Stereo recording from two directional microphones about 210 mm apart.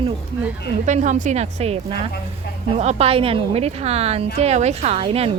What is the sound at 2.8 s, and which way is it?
A woman's voice, 30° right (ahead or behind).